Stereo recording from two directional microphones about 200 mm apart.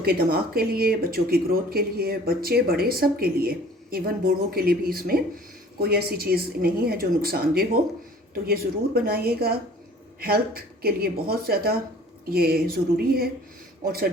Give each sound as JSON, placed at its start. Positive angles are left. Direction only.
{"t": 0.0, "sound": "speech", "side_deg": -50}